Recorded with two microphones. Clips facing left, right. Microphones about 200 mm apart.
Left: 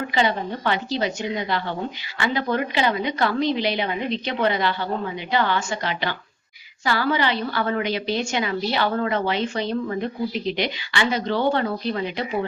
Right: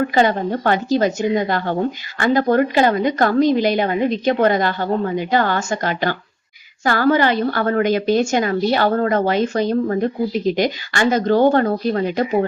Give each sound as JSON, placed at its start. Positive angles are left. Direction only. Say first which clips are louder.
{"t": 0.1, "sound": "a woman's voice", "louder": "right 6 dB", "side_deg": -45}